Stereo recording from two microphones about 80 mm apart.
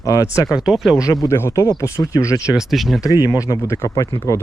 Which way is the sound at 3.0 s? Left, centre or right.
Left.